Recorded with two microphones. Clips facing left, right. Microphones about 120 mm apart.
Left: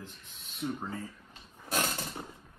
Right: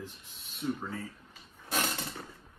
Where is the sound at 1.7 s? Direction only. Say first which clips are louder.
Left 1 dB; 15° left (ahead or behind).